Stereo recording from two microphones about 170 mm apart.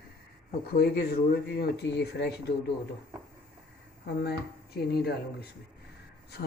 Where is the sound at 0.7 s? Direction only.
65° left (ahead or behind).